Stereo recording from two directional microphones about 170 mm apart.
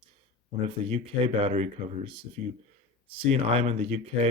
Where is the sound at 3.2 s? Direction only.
35° right (ahead or behind).